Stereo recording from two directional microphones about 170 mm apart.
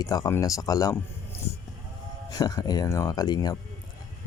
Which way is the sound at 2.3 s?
20° left (ahead or behind).